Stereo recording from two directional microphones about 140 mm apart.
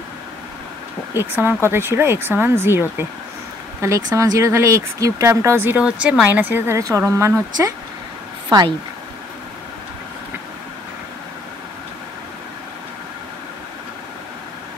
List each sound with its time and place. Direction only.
1.1 s speech: 15° right (ahead or behind)